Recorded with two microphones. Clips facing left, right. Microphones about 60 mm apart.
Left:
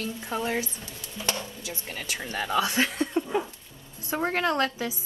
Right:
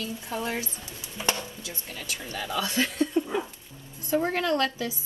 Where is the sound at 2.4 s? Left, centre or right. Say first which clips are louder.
Left 3 dB; left.